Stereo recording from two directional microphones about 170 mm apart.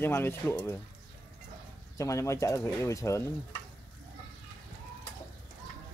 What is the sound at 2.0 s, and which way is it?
Speech, 15° left (ahead or behind).